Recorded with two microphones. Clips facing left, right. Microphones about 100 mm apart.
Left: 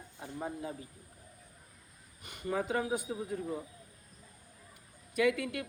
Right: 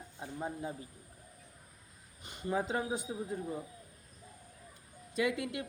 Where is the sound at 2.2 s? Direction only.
25° right (ahead or behind).